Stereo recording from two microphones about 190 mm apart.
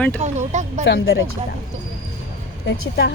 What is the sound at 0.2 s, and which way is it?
Speech, 40° right (ahead or behind).